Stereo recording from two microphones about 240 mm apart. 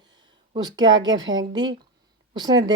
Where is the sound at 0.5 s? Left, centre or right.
Centre.